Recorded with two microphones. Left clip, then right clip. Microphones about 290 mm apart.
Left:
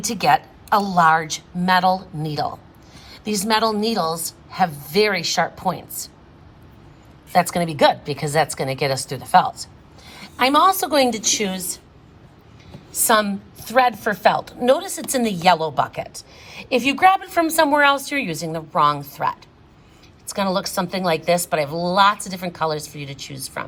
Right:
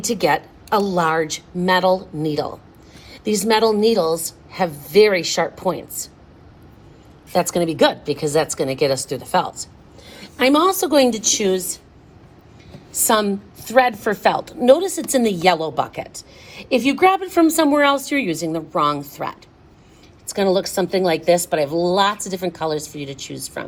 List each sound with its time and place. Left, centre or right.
0.0 s a woman's voice: left
7.3 s a woman's voice: left
10.1 s a sound: centre
10.8 s a woman's voice: left
11.4 s a woman's voice: left
12.9 s a woman's voice: centre